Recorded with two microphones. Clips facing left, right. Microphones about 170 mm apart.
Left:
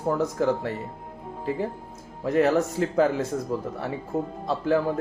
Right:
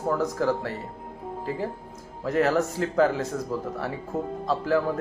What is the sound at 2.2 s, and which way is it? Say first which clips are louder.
A man's voice: left 2 dB; 20° left (ahead or behind).